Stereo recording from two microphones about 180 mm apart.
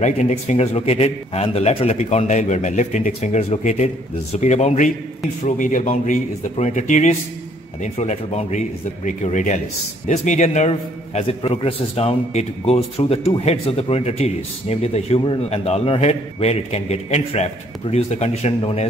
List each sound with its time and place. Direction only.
0.0 s a man's voice: 40° left (ahead or behind)